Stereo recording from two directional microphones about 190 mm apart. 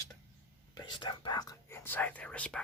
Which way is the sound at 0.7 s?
20° left (ahead or behind).